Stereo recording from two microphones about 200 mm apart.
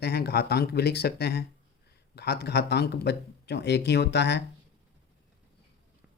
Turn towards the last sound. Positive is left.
turn(degrees=60)  # may be behind; listen again after turning